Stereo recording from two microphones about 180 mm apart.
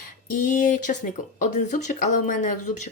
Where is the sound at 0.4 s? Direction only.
45° left (ahead or behind).